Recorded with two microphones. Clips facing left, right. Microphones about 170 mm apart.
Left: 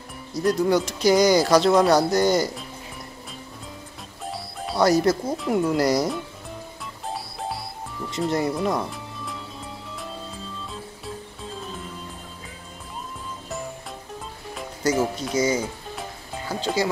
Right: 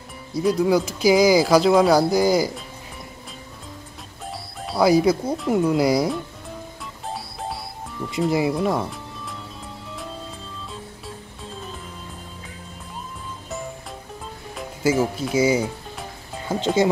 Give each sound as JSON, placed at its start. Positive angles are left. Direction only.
{"t": 0.3, "sound": "speech", "side_deg": 0}
{"t": 4.3, "sound": "speech", "side_deg": 0}
{"t": 7.1, "sound": "music", "side_deg": 0}
{"t": 8.1, "sound": "speech", "side_deg": 0}
{"t": 14.5, "sound": "speech", "side_deg": -5}
{"t": 16.4, "sound": "speech", "side_deg": -20}